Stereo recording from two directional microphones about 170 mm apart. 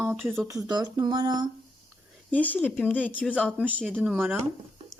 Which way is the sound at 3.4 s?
5° left (ahead or behind).